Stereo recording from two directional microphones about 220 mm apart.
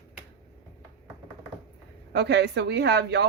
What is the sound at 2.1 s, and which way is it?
Speech, 50° right (ahead or behind).